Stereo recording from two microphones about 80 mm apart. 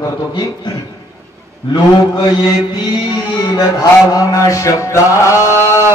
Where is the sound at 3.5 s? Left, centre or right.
Left.